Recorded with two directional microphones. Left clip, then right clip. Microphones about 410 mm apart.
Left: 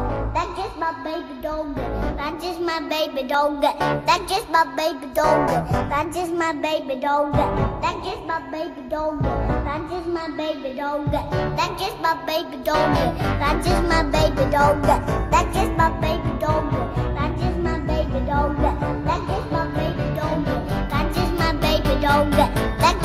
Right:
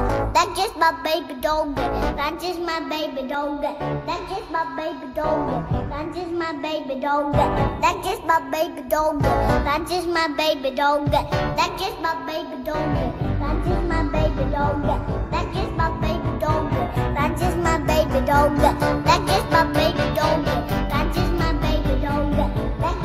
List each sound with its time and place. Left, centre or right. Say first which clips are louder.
0.1 s music: right 5 dB; right
1.4 s music: right 4 dB; centre
2.6 s music: left 4 dB; centre; by 4.2 s left
4.5 s a woman's voice: left 6 dB; left
5.9 s music: left 4 dB; centre
7.3 s music: right 1 dB; centre
8.9 s music: right 4 dB; right
10.1 s music: right 7 dB; right; by 15.0 s left
15.3 s music: left 6 dB; centre
17.2 s music: right 4 dB; right
18.3 s music: right 5 dB; right
19.8 s music: right 5 dB; centre; by 22.9 s left